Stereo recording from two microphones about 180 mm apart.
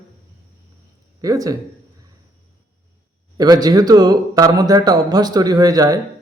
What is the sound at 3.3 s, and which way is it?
Speech, 20° right (ahead or behind).